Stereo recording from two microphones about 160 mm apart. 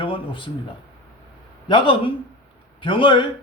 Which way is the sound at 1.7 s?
30° left (ahead or behind).